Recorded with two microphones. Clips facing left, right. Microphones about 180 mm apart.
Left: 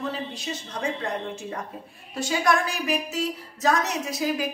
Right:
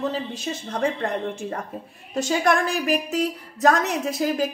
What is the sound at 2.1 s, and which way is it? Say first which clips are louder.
Speech: right 4 dB; 45° right (ahead or behind).